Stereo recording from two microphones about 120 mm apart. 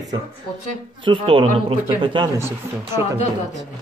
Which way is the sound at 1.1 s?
45° right (ahead or behind).